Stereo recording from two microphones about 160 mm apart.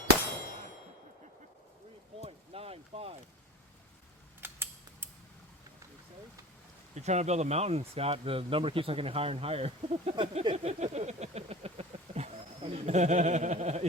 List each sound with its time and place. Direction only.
2.2 s a sound: 40° right (ahead or behind)
4.4 s mechanisms: 15° right (ahead or behind)
6.9 s speech: 45° right (ahead or behind)